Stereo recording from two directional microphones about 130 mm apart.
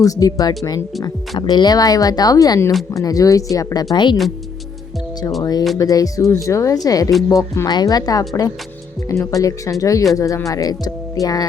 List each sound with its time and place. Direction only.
0.0 s speech: 25° left (ahead or behind)
5.4 s speech: 30° left (ahead or behind)